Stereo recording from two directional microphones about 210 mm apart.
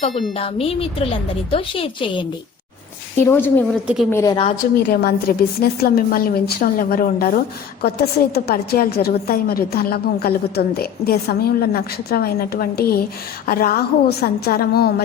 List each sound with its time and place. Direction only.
0.1 s speech: centre (ahead or behind)
0.3 s a woman's voice: 25° left (ahead or behind)
3.2 s a woman's voice: 10° left (ahead or behind)
4.9 s a woman's voice: 50° left (ahead or behind)